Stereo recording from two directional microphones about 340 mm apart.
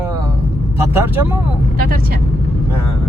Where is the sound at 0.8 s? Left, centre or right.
Centre.